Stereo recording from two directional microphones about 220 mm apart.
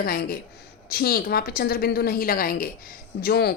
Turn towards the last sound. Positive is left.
turn(degrees=45)  # may be behind; listen again after turning